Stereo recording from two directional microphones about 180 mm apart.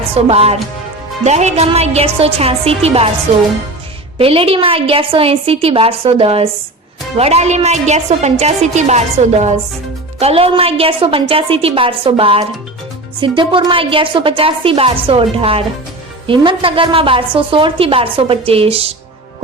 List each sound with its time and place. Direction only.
0.1 s a woman's voice: 35° right (ahead or behind)
4.2 s a woman's voice: 30° right (ahead or behind)